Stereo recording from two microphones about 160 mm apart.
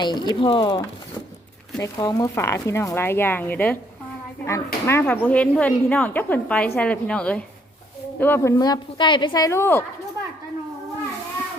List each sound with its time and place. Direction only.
0.0 s a woman's voice: 25° left (ahead or behind)